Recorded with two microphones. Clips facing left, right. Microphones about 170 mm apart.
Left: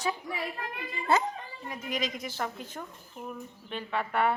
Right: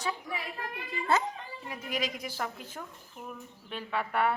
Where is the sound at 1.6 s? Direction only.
5° right (ahead or behind).